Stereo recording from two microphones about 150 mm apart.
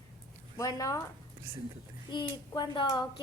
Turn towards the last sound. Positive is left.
turn(degrees=30)  # may be behind; listen again after turning